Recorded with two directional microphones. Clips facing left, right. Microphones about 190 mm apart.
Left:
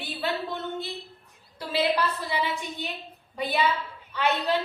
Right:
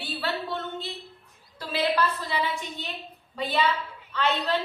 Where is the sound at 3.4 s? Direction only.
10° left (ahead or behind).